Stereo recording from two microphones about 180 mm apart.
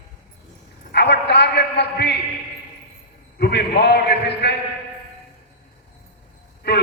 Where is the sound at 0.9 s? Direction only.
70° left (ahead or behind).